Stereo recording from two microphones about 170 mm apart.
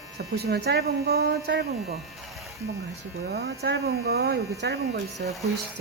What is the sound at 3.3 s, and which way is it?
Speech, 80° right.